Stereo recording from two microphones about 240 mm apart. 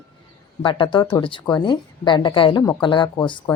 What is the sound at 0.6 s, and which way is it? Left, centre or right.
A woman's voice, left.